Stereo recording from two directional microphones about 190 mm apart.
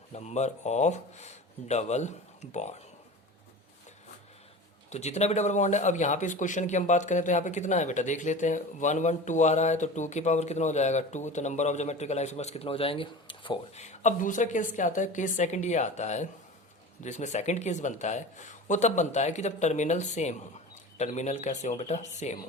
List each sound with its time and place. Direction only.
0.1 s a man's voice: 35° left (ahead or behind)
4.9 s a man's voice: 35° left (ahead or behind)
13.8 s a man's voice: 40° left (ahead or behind)